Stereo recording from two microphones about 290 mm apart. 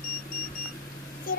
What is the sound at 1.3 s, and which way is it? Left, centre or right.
Speech, left.